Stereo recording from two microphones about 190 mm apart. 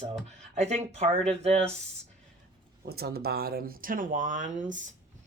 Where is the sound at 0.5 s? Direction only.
35° right (ahead or behind).